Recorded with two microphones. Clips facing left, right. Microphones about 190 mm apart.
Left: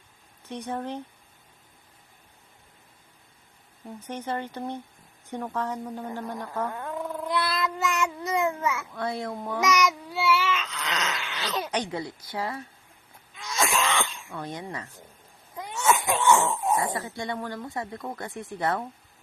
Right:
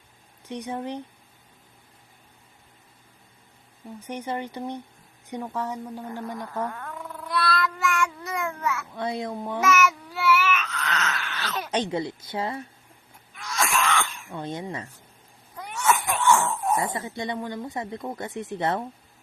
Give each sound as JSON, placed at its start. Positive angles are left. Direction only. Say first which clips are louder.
{"t": 0.4, "sound": "a woman's voice", "louder": "right 1 dB", "side_deg": -10}
{"t": 4.0, "sound": "a woman's voice", "louder": "right 1 dB", "side_deg": -10}
{"t": 6.7, "sound": "cat", "louder": "left 5 dB", "side_deg": 20}
{"t": 8.9, "sound": "a woman's voice", "louder": "right 1 dB", "side_deg": -20}
{"t": 9.7, "sound": "baby cry", "louder": "right 1 dB", "side_deg": 15}
{"t": 11.7, "sound": "speech", "louder": "right 4 dB", "side_deg": -25}
{"t": 13.3, "sound": "throat clearing", "louder": "even", "side_deg": 20}
{"t": 14.3, "sound": "speech", "louder": "right 3 dB", "side_deg": -20}
{"t": 15.5, "sound": "speech", "louder": "even", "side_deg": 20}
{"t": 16.8, "sound": "speech", "louder": "right 1 dB", "side_deg": -20}